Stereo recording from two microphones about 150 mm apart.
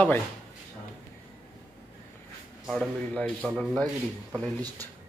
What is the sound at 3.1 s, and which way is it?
Speech, 10° left (ahead or behind).